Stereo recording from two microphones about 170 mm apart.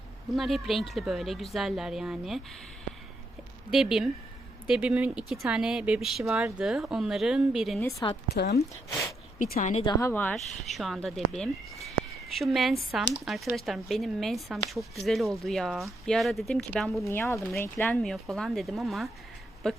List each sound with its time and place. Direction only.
0.3 s speech: centre (ahead or behind)
3.7 s speech: centre (ahead or behind)
7.8 s speech: 20° left (ahead or behind)
8.3 s speech: 75° left (ahead or behind)
9.4 s a woman's voice: 50° left (ahead or behind)
9.7 s a woman's voice: 30° left (ahead or behind)
10.0 s speech: 10° left (ahead or behind)
17.0 s speech: 15° left (ahead or behind)